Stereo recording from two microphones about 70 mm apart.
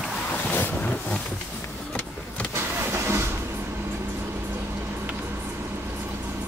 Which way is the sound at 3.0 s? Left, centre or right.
Right.